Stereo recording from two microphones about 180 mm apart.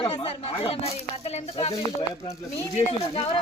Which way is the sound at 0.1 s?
35° left (ahead or behind).